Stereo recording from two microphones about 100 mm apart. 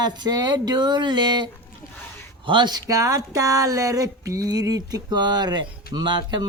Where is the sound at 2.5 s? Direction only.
50° right (ahead or behind).